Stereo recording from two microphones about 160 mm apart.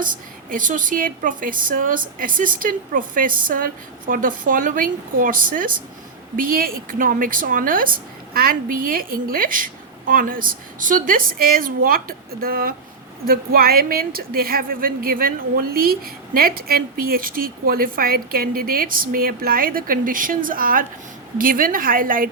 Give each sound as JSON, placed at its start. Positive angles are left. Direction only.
{"t": 0.0, "sound": "a woman's voice", "side_deg": -55}